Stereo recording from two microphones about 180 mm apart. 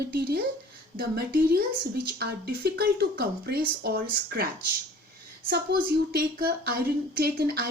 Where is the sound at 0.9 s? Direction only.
60° right (ahead or behind).